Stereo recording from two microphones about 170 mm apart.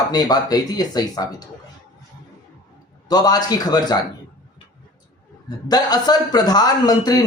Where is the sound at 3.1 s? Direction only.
25° left (ahead or behind).